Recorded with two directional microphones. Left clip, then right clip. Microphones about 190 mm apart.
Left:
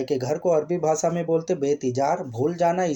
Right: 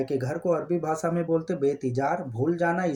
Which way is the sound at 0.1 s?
30° left (ahead or behind).